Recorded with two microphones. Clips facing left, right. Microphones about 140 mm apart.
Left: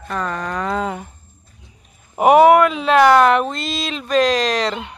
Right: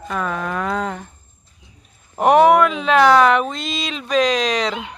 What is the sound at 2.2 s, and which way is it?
Speech, 5° left (ahead or behind).